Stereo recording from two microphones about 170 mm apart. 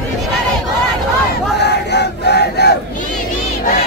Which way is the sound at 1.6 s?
80° left.